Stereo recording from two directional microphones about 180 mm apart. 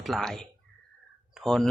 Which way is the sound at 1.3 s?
Centre (ahead or behind).